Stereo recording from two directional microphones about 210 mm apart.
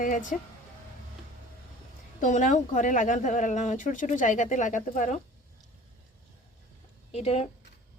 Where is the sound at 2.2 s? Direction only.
35° left (ahead or behind).